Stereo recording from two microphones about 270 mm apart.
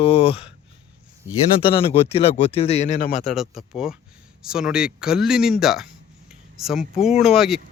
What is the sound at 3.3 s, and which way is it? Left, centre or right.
Speech, centre.